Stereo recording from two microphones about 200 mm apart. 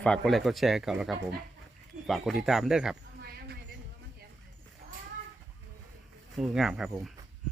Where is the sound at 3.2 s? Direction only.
50° right (ahead or behind).